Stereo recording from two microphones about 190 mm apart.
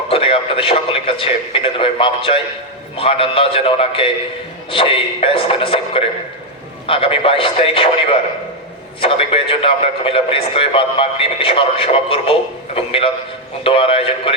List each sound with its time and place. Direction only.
0.1 s speech: 30° left (ahead or behind)